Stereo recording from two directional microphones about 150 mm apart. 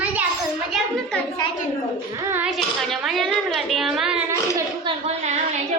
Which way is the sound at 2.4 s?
Centre (ahead or behind).